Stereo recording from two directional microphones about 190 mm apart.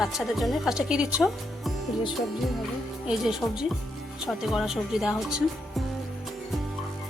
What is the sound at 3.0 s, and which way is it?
Speech, 5° right (ahead or behind).